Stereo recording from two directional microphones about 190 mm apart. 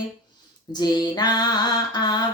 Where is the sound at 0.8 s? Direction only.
20° left (ahead or behind).